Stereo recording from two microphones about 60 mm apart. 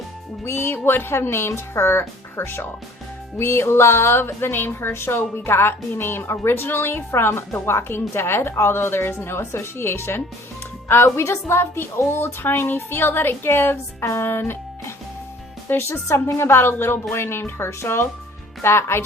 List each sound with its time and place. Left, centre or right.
0.4 s a woman's voice: left